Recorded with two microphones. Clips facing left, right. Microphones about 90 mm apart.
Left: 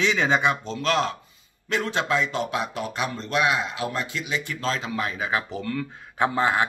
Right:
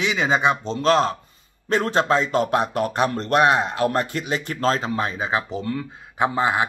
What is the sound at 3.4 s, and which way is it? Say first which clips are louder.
Speech: right 6 dB; 40° right (ahead or behind).